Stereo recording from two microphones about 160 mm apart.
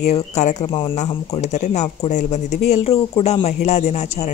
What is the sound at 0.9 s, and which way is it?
Speech, 45° left (ahead or behind).